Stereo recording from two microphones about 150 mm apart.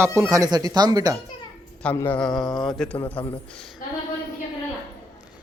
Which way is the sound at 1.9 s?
15° left (ahead or behind).